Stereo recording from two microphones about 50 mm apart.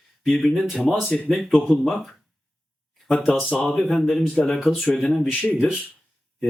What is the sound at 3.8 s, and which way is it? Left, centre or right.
Speech, centre.